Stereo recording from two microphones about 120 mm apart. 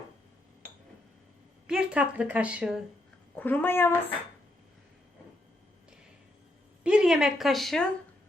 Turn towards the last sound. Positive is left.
turn(degrees=0)  # may be behind; listen again after turning